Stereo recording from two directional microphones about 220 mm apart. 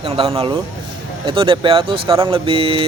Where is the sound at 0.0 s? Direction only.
25° right (ahead or behind).